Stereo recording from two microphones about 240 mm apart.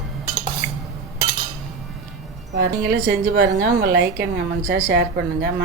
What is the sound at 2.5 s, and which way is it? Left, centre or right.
A woman's voice, right.